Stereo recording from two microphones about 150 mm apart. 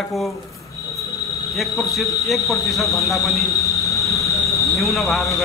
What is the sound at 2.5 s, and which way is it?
Speech, centre (ahead or behind).